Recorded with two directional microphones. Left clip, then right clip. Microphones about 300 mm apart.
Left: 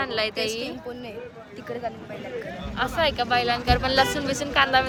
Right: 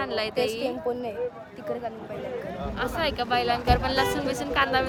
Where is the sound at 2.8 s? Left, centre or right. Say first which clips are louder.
Left 4 dB; centre.